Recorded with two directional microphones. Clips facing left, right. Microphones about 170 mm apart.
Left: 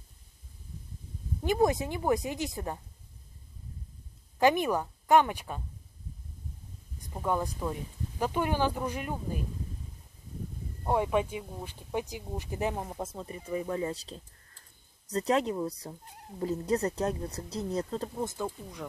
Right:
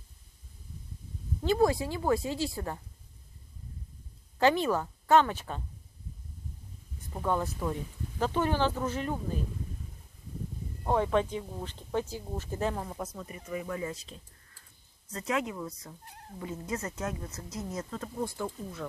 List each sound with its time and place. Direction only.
1.4 s a woman's voice: 20° left (ahead or behind)
4.4 s speech: 15° left (ahead or behind)
7.0 s speech: 10° left (ahead or behind)
10.9 s speech: 10° left (ahead or behind)
12.8 s a woman's voice: 25° left (ahead or behind)
18.2 s speech: 20° left (ahead or behind)